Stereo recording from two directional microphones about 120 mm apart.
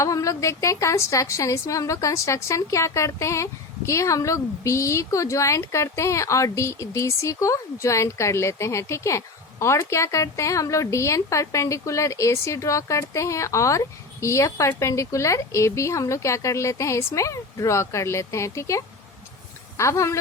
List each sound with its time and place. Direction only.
0.0 s a woman's voice: 25° left (ahead or behind)